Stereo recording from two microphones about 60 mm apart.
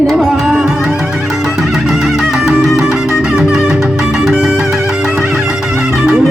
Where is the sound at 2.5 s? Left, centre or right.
Centre.